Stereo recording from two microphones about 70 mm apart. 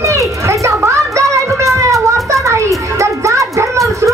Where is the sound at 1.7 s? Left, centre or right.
Right.